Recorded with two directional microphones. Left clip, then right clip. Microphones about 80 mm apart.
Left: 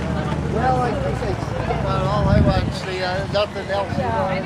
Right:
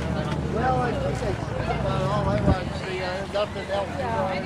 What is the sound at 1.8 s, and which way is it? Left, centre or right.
Vehicle, left.